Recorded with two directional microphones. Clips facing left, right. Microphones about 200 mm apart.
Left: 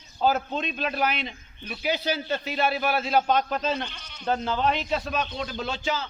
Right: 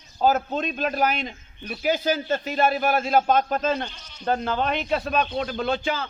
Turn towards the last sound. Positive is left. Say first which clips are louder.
# right 4 dB
turn(degrees=-55)  # may be behind; listen again after turning